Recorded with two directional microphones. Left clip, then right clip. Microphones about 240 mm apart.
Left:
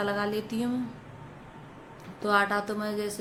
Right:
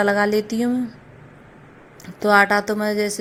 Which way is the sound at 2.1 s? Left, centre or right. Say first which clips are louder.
Right 10 dB; right.